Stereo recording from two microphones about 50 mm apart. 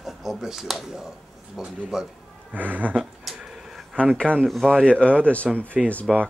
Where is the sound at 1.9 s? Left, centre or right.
Centre.